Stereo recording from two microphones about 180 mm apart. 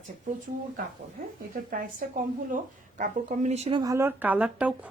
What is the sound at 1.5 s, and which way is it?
Speech, 50° right (ahead or behind).